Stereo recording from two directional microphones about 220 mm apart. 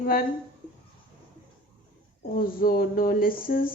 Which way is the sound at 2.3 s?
40° left (ahead or behind).